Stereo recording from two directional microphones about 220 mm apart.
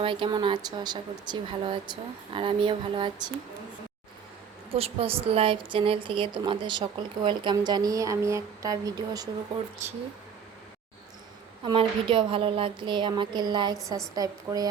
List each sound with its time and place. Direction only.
0.0 s a woman's voice: 20° right (ahead or behind)
4.7 s a woman's voice: 25° right (ahead or behind)
11.6 s a woman's voice: 20° right (ahead or behind)